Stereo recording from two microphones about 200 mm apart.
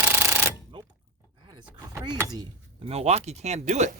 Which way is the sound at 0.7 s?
25° right (ahead or behind).